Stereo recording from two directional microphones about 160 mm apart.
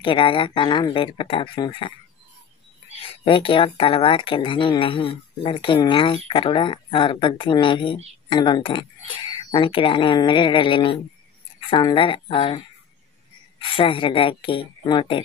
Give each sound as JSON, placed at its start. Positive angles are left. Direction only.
{"t": 0.0, "sound": "speech", "side_deg": 30}
{"t": 3.0, "sound": "speech", "side_deg": 35}